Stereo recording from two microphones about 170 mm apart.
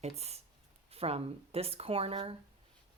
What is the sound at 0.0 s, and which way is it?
A woman's voice, 40° right (ahead or behind).